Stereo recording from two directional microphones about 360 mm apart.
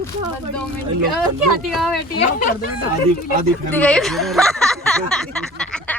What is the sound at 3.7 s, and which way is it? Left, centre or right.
Speech, centre.